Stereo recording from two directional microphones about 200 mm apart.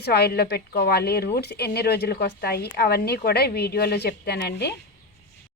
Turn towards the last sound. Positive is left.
turn(degrees=55)  # may be behind; listen again after turning